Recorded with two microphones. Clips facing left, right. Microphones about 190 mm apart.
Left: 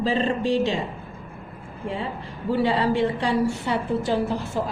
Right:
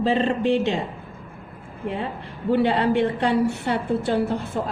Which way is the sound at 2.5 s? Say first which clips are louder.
Right 2 dB; 60° right (ahead or behind).